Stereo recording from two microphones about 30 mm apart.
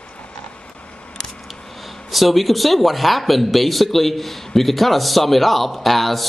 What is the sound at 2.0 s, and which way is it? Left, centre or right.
A man's voice, centre.